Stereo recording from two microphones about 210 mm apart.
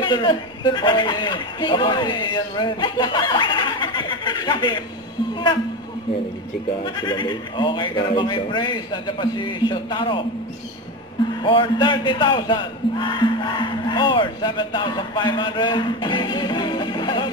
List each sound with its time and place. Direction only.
0.0 s a man's voice: 20° left (ahead or behind)
7.0 s a man's voice: 20° left (ahead or behind)
11.4 s a man's voice: 25° left (ahead or behind)